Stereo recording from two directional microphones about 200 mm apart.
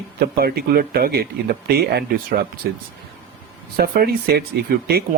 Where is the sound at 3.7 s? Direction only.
50° right (ahead or behind).